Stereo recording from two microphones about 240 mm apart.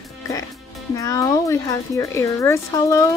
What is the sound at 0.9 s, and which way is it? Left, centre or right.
Speech, centre.